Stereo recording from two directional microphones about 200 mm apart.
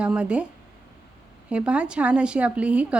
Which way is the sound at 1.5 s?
5° right (ahead or behind).